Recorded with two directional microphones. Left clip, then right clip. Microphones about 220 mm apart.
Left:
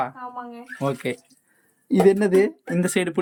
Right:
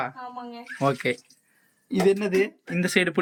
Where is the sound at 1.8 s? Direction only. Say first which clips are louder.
Left 5 dB; 25° left (ahead or behind).